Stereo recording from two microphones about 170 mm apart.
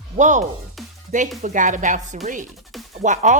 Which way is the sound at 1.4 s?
50° right (ahead or behind).